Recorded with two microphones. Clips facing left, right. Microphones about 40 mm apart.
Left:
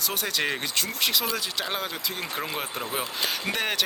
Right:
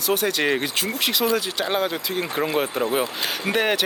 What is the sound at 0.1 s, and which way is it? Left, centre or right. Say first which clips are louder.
Speech: right 9 dB; centre.